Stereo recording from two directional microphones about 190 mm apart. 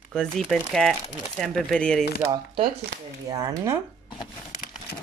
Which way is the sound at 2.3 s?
25° right (ahead or behind).